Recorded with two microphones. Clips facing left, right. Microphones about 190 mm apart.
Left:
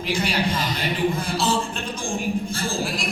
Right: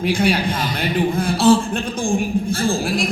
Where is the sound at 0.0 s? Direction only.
55° right (ahead or behind).